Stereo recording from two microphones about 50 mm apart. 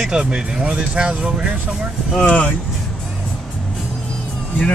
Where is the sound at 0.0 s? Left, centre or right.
Centre.